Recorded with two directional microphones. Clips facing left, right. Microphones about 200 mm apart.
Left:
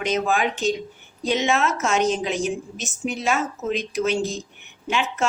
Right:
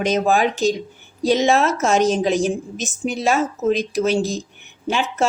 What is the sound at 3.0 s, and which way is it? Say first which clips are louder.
A woman's voice: right 4 dB; 40° right (ahead or behind).